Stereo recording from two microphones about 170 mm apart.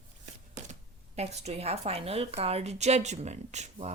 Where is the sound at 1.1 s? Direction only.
40° right (ahead or behind).